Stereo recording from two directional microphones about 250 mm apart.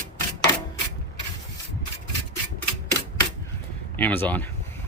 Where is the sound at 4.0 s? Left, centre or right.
Centre.